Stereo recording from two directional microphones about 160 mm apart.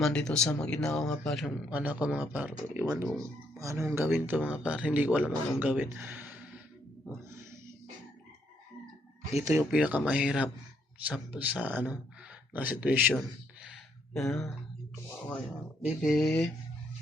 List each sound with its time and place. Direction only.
0.0 s speech: 5° left (ahead or behind)
1.7 s speech: 10° right (ahead or behind)
2.8 s speech: 20° right (ahead or behind)
7.3 s wild animals: 15° right (ahead or behind)
9.6 s speech: 10° right (ahead or behind)
14.1 s speech: centre (ahead or behind)
15.8 s speech: centre (ahead or behind)